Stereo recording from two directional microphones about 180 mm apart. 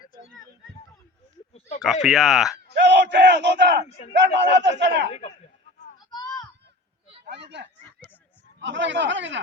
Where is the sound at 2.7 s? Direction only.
75° right (ahead or behind).